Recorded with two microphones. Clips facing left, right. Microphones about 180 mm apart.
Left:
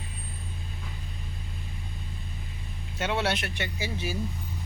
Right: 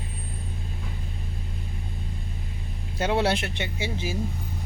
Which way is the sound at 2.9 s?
35° right (ahead or behind).